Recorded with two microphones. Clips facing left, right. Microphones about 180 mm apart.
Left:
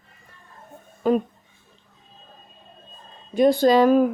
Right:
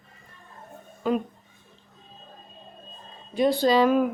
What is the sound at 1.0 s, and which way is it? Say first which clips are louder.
Speech: left 5 dB; 45° left (ahead or behind).